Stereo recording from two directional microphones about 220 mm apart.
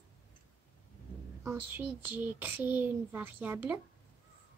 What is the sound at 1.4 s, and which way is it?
Speech, 10° right (ahead or behind).